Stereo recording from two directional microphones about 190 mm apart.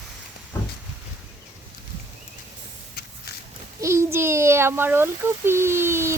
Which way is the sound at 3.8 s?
15° right (ahead or behind).